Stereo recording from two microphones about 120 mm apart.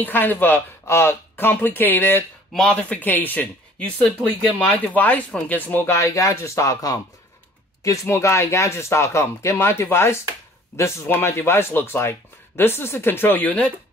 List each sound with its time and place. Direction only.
0.0 s speech: 15° left (ahead or behind)